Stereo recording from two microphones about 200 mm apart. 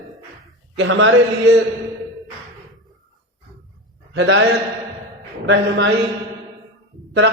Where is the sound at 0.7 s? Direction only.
65° right (ahead or behind).